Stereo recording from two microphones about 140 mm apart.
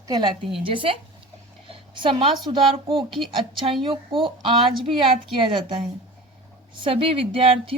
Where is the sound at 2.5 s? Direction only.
40° right (ahead or behind).